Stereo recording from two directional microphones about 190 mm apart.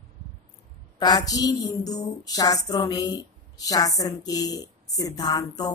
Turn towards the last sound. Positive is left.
turn(degrees=20)  # may be behind; listen again after turning